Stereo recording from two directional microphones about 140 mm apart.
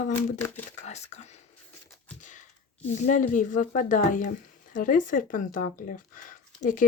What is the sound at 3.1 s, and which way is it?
Speech, 65° left (ahead or behind).